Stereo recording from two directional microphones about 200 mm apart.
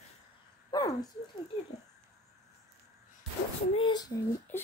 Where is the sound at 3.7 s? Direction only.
20° left (ahead or behind).